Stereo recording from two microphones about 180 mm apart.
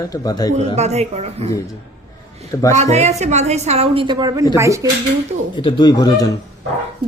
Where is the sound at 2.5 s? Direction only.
15° left (ahead or behind).